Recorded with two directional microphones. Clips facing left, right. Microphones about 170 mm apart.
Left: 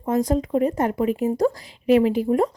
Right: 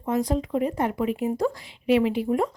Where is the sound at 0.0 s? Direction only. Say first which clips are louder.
Left 3 dB; 45° left (ahead or behind).